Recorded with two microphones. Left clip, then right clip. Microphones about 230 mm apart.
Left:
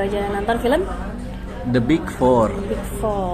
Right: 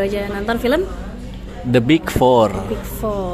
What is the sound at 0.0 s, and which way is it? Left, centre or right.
A woman's voice, right.